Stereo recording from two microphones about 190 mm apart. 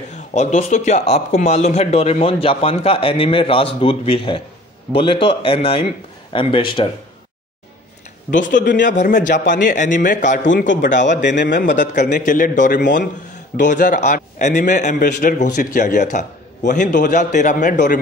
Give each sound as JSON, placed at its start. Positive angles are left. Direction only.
{"t": 0.3, "sound": "speech", "side_deg": 35}
{"t": 8.3, "sound": "a man's voice", "side_deg": 45}
{"t": 9.3, "sound": "a man's voice", "side_deg": 65}
{"t": 9.7, "sound": "a man's voice", "side_deg": 40}
{"t": 11.2, "sound": "a man's voice", "side_deg": 65}
{"t": 11.5, "sound": "a man's voice", "side_deg": 40}